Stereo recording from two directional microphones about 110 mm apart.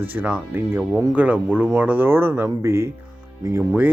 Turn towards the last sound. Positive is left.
turn(degrees=-15)  # may be behind; listen again after turning